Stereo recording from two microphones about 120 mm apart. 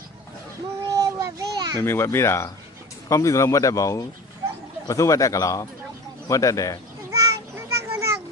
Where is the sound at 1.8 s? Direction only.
20° left (ahead or behind).